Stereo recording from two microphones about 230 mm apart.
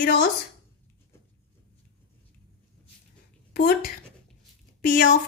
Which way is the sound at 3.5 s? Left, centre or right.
Left.